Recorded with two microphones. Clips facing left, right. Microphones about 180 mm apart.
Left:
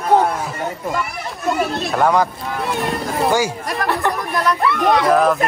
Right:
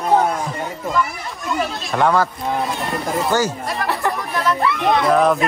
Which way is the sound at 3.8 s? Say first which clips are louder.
Left 2 dB; centre (ahead or behind).